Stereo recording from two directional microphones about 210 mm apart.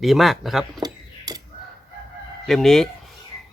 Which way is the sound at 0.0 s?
Centre (ahead or behind).